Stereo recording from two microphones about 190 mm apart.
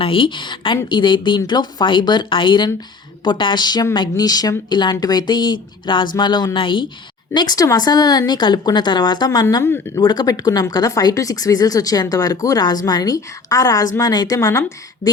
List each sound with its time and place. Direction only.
0.0 s speech: 25° left (ahead or behind)